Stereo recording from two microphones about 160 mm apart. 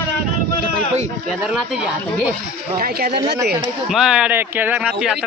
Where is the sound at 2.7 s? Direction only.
70° right (ahead or behind).